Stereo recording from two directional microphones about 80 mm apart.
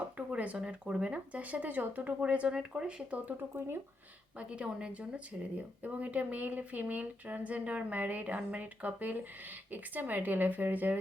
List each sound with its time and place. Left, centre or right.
0.2 s speech: centre
4.4 s speech: centre